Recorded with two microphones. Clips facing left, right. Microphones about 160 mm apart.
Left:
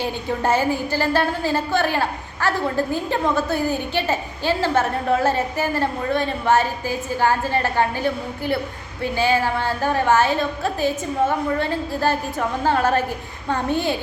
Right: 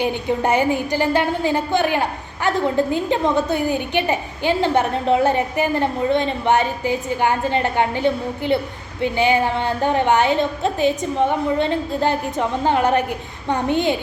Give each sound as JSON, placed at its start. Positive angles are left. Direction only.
{"t": 0.0, "sound": "a woman's voice", "side_deg": -15}